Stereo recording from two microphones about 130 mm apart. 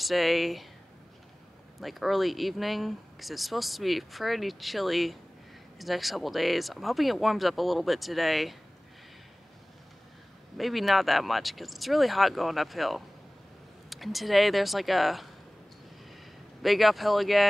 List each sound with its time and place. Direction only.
0.0 s speech: centre (ahead or behind)
1.8 s speech: centre (ahead or behind)
10.6 s speech: centre (ahead or behind)
16.6 s speech: centre (ahead or behind)